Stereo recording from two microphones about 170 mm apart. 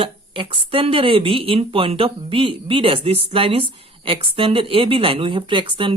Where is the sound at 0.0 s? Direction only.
30° right (ahead or behind).